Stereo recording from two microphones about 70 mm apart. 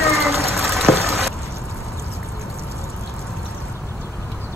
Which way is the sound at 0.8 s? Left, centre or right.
Centre.